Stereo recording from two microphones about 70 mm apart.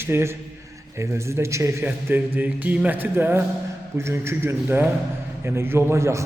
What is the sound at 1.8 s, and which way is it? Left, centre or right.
A man's voice, right.